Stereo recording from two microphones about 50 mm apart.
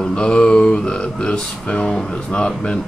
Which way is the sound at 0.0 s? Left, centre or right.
Centre.